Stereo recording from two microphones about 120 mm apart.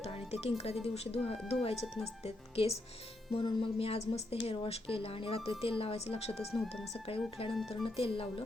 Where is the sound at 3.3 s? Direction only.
45° left (ahead or behind).